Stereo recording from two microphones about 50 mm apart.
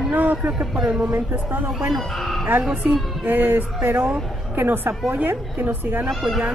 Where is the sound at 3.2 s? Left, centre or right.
Right.